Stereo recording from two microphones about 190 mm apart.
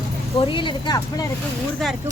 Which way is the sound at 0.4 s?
25° left (ahead or behind).